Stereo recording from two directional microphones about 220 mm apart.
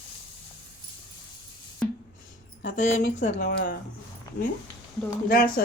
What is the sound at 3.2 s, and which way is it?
Speech, 40° left (ahead or behind).